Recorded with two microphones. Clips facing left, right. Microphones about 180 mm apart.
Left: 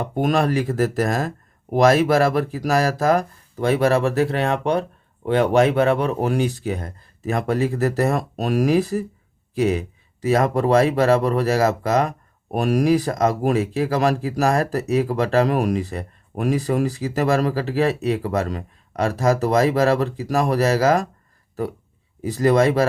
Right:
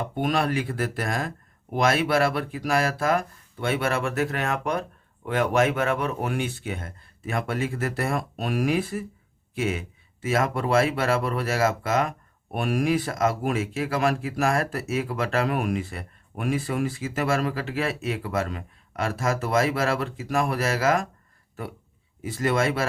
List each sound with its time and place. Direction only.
0.0 s speech: 45° left (ahead or behind)
22.2 s speech: 35° left (ahead or behind)